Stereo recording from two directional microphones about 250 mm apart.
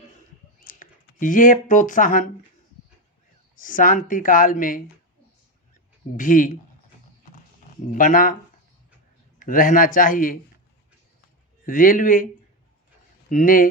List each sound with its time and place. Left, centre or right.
0.6 s speech: left
3.5 s speech: left
6.1 s speech: left
7.9 s speech: left
9.4 s speech: left
11.6 s speech: left
13.3 s speech: left